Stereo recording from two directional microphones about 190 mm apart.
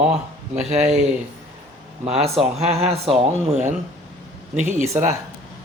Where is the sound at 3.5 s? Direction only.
40° right (ahead or behind).